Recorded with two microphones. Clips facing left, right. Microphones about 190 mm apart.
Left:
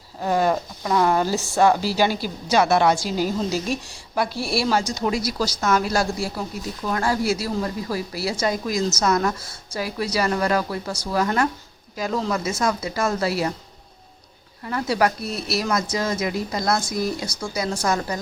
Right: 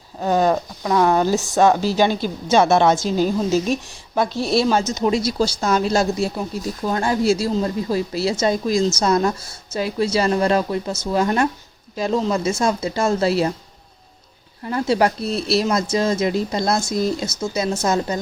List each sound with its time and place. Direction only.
0.2 s a sound: 20° right (ahead or behind)
1.0 s a woman's voice: 20° right (ahead or behind)
14.6 s a woman's voice: 25° right (ahead or behind)